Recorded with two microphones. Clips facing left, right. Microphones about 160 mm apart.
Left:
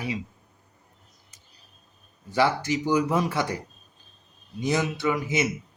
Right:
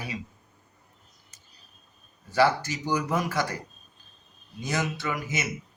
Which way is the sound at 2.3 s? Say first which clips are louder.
Even; 20° left (ahead or behind).